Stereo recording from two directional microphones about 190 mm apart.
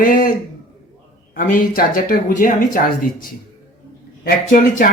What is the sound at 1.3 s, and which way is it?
Speech, 45° left (ahead or behind).